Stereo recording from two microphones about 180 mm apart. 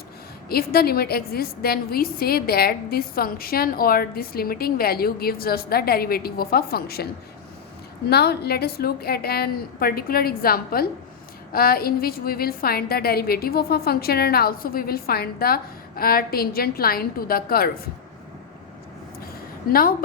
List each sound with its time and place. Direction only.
0.4 s a woman's voice: 60° left (ahead or behind)
8.1 s a woman's voice: 65° left (ahead or behind)
19.6 s a woman's voice: 55° left (ahead or behind)